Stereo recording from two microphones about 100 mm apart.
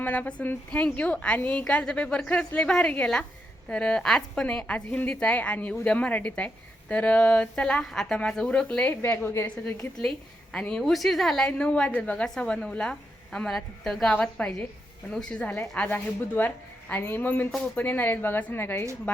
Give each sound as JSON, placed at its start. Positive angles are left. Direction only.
{"t": 0.0, "sound": "a woman's voice", "side_deg": 15}
{"t": 10.5, "sound": "a woman's voice", "side_deg": 10}
{"t": 14.2, "sound": "a woman's voice", "side_deg": 15}